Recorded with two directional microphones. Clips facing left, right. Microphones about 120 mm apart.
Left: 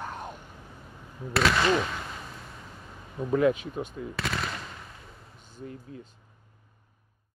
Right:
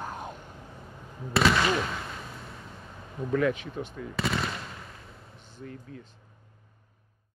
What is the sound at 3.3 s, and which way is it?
Speech, 20° left (ahead or behind).